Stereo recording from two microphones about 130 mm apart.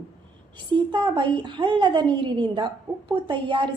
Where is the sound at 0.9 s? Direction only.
35° right (ahead or behind).